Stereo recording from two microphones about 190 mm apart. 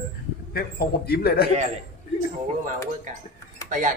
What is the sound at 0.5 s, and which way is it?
Speech, 55° left (ahead or behind).